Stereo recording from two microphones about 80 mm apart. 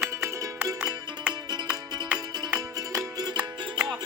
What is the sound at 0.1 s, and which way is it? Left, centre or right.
Music, right.